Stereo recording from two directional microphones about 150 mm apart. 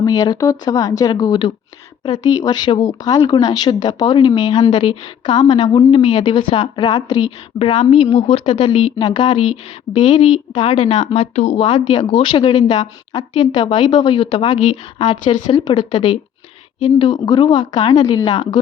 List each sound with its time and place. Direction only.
0.0 s a woman's voice: 25° left (ahead or behind)
7.3 s a woman's voice: 40° left (ahead or behind)
9.0 s a woman's voice: 30° left (ahead or behind)
11.0 s a woman's voice: 45° left (ahead or behind); by 18.6 s 30° left (ahead or behind)